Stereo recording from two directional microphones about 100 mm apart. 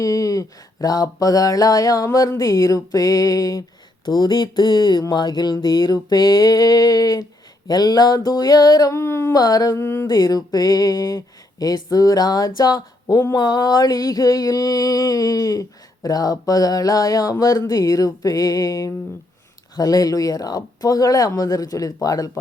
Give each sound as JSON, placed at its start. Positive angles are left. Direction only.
{"t": 0.0, "sound": "mantra", "side_deg": 35}
{"t": 4.0, "sound": "a sound", "side_deg": 45}
{"t": 7.7, "sound": "mantra", "side_deg": 40}
{"t": 9.4, "sound": "mantra", "side_deg": 40}
{"t": 10.1, "sound": "mantra", "side_deg": 40}
{"t": 12.5, "sound": "speech", "side_deg": 40}
{"t": 13.3, "sound": "mantra", "side_deg": 40}